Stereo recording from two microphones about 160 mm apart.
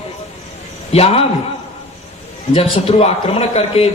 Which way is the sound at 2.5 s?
40° left (ahead or behind).